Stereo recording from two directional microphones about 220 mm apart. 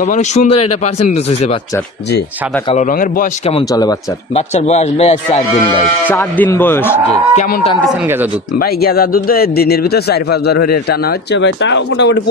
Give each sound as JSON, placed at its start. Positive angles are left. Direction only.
{"t": 0.0, "sound": "a man's voice", "side_deg": 30}
{"t": 2.7, "sound": "a man's voice", "side_deg": 35}
{"t": 3.5, "sound": "speech", "side_deg": 15}
{"t": 4.4, "sound": "a man's voice", "side_deg": 30}
{"t": 6.0, "sound": "speech", "side_deg": 10}
{"t": 7.1, "sound": "a man's voice", "side_deg": 30}
{"t": 8.5, "sound": "speech", "side_deg": 45}